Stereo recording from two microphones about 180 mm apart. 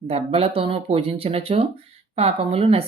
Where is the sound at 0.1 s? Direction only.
30° right (ahead or behind).